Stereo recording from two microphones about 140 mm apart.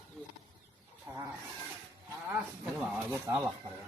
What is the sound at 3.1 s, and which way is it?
Speech, 15° right (ahead or behind).